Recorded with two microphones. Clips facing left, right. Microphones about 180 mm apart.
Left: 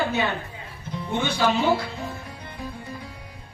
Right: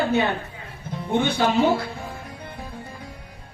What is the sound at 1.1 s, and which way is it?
Speech, 55° right (ahead or behind).